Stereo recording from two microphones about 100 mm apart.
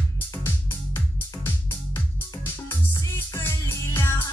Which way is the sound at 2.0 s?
20° left (ahead or behind).